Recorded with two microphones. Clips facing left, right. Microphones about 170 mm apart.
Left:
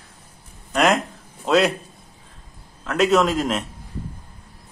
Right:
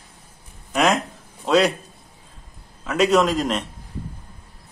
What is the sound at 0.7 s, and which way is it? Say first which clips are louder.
Speech: left 1 dB; centre (ahead or behind).